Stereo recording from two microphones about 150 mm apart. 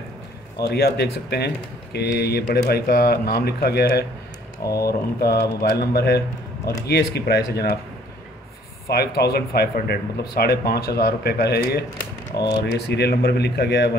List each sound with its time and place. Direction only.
0.6 s speech: 90° left
8.8 s speech: 90° left
12.4 s speech: 25° left (ahead or behind)
12.7 s speech: 90° left